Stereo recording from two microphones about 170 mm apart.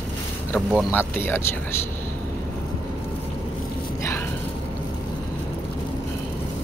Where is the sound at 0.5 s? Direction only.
10° left (ahead or behind).